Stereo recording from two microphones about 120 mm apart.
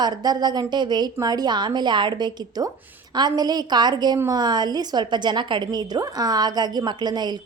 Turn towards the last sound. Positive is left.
turn(degrees=-35)  # may be behind; listen again after turning